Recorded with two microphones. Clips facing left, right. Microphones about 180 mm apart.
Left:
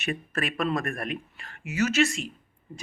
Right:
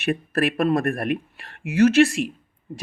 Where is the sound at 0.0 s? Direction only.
60° right (ahead or behind).